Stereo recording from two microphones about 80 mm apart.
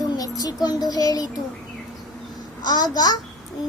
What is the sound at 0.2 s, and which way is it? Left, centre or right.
Speech, left.